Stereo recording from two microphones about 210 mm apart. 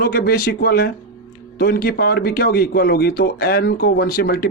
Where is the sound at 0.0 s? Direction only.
45° left (ahead or behind).